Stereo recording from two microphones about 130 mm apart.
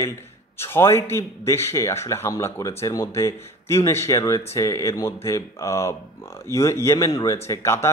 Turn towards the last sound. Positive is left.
turn(degrees=20)  # may be behind; listen again after turning